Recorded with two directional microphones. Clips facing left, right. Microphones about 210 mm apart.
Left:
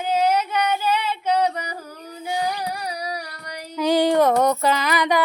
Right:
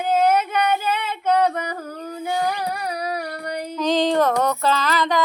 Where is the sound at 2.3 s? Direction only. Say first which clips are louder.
Right 1 dB; 55° right (ahead or behind).